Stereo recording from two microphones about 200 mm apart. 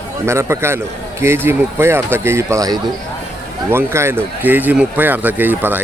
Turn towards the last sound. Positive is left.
turn(degrees=-10)  # may be behind; listen again after turning